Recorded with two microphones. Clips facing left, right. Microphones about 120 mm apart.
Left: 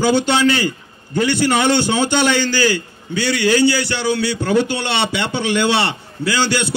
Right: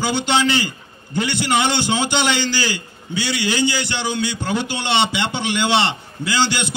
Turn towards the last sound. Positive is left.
turn(degrees=-15)  # may be behind; listen again after turning